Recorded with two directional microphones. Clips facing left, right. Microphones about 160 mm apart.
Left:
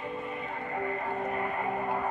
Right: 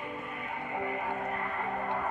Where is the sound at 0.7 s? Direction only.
15° right (ahead or behind).